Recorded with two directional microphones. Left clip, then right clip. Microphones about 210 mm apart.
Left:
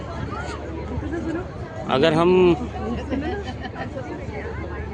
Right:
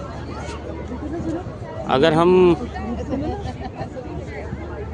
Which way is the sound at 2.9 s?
50° right (ahead or behind).